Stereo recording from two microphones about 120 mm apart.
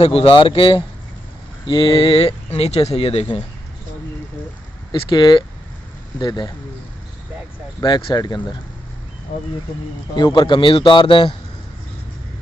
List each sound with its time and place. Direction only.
0.0 s speech: 50° left (ahead or behind)
4.9 s a man's voice: 40° left (ahead or behind)
7.8 s a man's voice: 35° left (ahead or behind)
10.1 s a man's voice: 40° left (ahead or behind)